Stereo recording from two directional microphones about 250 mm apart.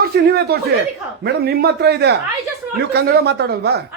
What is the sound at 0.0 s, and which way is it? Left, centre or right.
A man's voice, right.